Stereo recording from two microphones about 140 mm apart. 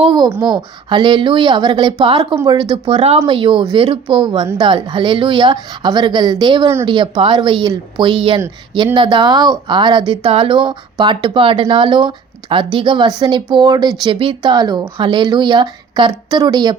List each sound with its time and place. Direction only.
0.0 s speech: 35° right (ahead or behind)
2.0 s speech: 40° right (ahead or behind)